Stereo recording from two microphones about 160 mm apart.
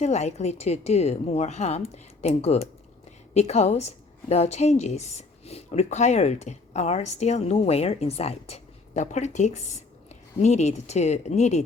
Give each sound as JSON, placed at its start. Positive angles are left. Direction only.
{"t": 0.0, "sound": "a woman's voice", "side_deg": 45}